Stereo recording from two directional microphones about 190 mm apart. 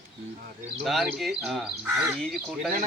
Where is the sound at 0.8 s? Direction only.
Centre (ahead or behind).